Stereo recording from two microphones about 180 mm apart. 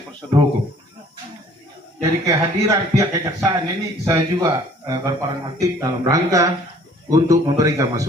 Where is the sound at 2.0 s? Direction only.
15° right (ahead or behind).